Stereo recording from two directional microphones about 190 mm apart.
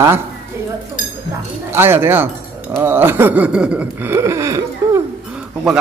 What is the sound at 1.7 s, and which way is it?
Speech, 10° right (ahead or behind).